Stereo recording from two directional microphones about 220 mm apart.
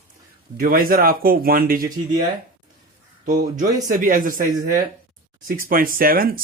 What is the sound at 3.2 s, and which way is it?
Speech, 35° right (ahead or behind).